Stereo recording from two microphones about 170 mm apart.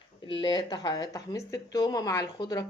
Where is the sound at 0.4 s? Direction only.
25° left (ahead or behind).